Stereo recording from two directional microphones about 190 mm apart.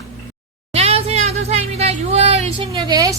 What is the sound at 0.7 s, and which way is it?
Speech, 35° right (ahead or behind).